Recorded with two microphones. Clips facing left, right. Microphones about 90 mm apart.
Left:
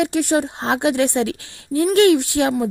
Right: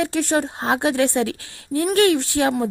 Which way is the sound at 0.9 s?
20° left (ahead or behind).